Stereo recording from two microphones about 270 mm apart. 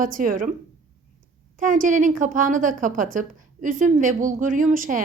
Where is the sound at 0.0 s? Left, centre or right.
Right.